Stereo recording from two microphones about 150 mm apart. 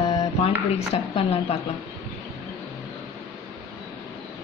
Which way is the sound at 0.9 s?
40° left (ahead or behind).